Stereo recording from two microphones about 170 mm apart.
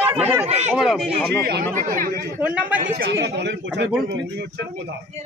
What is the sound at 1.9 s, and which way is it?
Speech, 55° right (ahead or behind).